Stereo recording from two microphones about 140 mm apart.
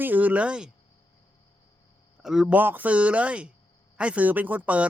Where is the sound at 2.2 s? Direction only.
5° right (ahead or behind).